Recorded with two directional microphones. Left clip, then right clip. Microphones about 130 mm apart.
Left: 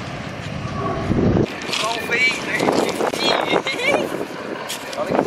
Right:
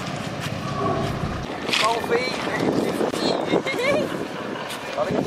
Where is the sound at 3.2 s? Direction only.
15° left (ahead or behind).